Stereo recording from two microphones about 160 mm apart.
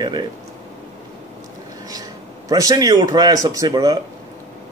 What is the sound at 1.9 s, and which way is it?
A man's voice, 25° right (ahead or behind).